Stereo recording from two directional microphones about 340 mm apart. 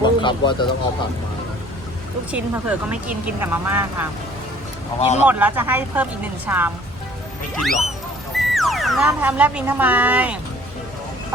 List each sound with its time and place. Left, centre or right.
0.0 s speech: centre
2.3 s speech: centre
4.9 s speech: centre
5.2 s speech: centre
8.4 s speech: centre